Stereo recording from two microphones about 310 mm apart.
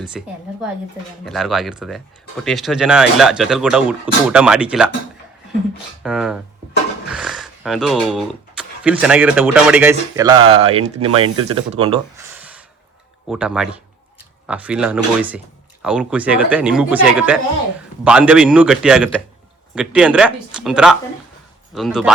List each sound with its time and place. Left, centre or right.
0.1 s speech: centre
6.0 s speech: centre